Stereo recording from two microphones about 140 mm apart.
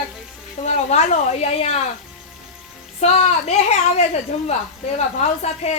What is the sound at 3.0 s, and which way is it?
A woman's voice, 50° left (ahead or behind).